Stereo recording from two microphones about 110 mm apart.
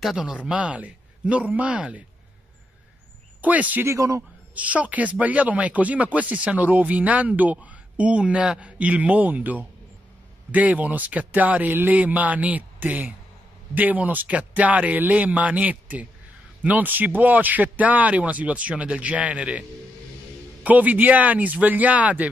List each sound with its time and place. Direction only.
0.0 s speech: 5° right (ahead or behind)
3.3 s speech: 15° right (ahead or behind)
3.9 s a man's voice: 30° right (ahead or behind)
4.6 s speech: 10° right (ahead or behind)
20.6 s speech: 15° right (ahead or behind)